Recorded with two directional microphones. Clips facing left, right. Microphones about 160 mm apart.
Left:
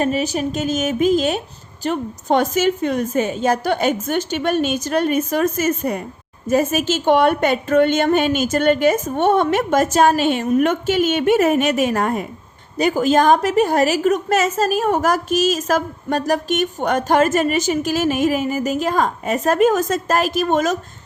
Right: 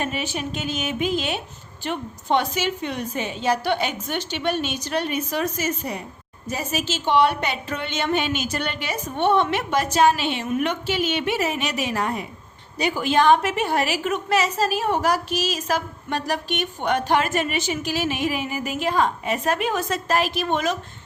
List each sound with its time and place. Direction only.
0.0 s a woman's voice: 40° left (ahead or behind)